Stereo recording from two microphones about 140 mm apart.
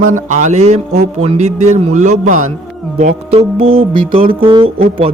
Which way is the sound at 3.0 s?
40° right (ahead or behind).